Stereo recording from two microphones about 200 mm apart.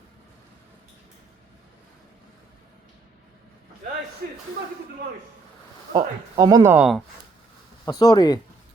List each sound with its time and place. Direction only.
5.9 s speech: 20° right (ahead or behind)
7.9 s speech: 20° left (ahead or behind)